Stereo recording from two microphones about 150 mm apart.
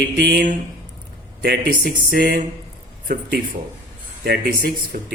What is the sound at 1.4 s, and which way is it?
Speech, 90° right.